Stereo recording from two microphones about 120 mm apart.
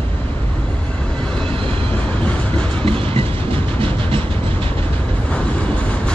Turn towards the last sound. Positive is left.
turn(degrees=-50)  # may be behind; listen again after turning